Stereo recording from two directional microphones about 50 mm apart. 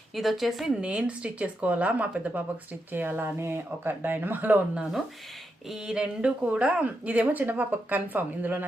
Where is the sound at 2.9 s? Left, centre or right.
Right.